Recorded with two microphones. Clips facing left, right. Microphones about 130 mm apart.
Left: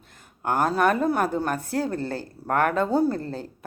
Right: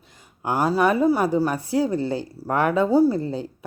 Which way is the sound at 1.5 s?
50° left (ahead or behind).